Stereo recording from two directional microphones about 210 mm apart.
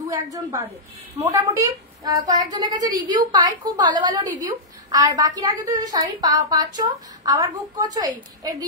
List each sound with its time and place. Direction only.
0.0 s a woman's voice: 15° right (ahead or behind)